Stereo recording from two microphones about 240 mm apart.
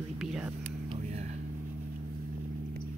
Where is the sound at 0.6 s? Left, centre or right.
Right.